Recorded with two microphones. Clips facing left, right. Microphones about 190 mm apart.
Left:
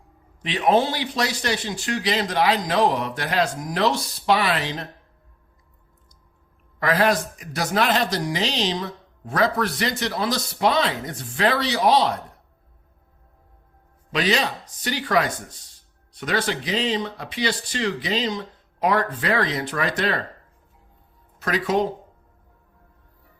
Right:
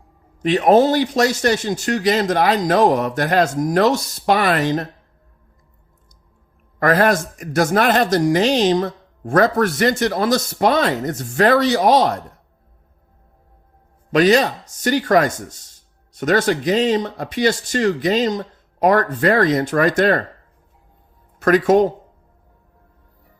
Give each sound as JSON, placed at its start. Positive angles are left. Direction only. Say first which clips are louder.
{"t": 0.4, "sound": "speech", "louder": "right 7 dB", "side_deg": -45}
{"t": 6.7, "sound": "speech", "louder": "right 5 dB", "side_deg": -50}
{"t": 14.1, "sound": "speech", "louder": "right 9 dB", "side_deg": -45}
{"t": 21.3, "sound": "speech", "louder": "right 9 dB", "side_deg": -50}